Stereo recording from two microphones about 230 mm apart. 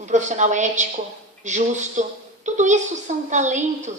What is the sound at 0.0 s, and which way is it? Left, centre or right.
A woman's voice, right.